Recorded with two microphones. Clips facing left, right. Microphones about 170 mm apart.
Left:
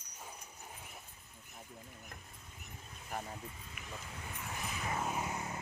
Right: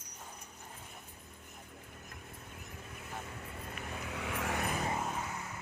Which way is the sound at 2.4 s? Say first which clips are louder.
Right 5 dB; 70° right (ahead or behind).